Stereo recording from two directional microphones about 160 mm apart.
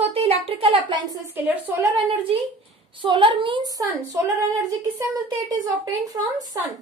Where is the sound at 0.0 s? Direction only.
40° right (ahead or behind).